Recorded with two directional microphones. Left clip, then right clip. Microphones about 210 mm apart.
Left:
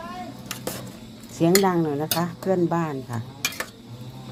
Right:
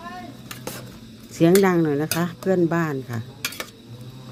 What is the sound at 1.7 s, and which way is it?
Speech, 35° right (ahead or behind).